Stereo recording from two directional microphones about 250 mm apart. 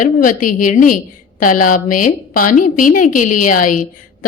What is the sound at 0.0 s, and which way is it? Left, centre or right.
A woman's voice, left.